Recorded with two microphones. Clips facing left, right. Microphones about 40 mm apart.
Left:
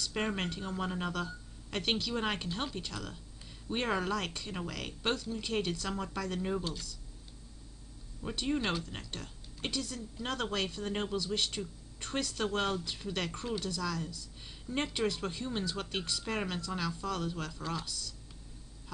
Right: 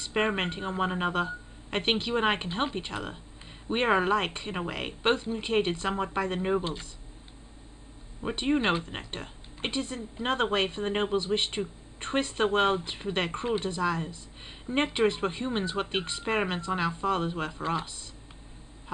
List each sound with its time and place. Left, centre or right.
0.0 s speech: right
8.2 s speech: right